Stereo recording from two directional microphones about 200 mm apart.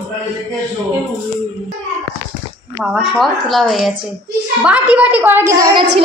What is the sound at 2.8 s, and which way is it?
A woman's voice, centre (ahead or behind).